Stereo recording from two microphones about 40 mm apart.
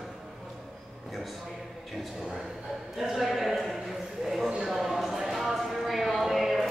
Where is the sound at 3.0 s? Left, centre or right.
Centre.